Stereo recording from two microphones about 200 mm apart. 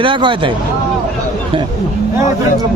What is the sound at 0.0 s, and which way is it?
Speech, 25° right (ahead or behind).